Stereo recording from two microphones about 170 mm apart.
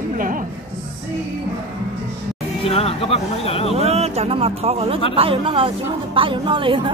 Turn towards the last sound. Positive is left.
turn(degrees=-30)  # may be behind; listen again after turning